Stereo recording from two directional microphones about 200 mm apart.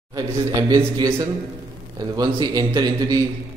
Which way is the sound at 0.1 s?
20° right (ahead or behind).